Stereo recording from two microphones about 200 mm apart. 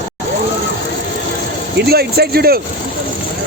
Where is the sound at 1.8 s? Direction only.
50° right (ahead or behind).